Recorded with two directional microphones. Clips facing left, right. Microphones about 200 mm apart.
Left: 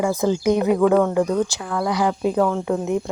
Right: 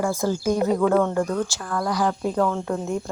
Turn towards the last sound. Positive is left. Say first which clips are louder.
# left 4 dB
turn(degrees=15)  # may be behind; listen again after turning